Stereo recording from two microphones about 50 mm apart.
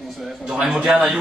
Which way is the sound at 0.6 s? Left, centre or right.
Centre.